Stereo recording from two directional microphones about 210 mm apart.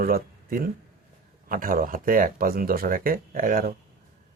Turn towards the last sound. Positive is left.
turn(degrees=-45)  # may be behind; listen again after turning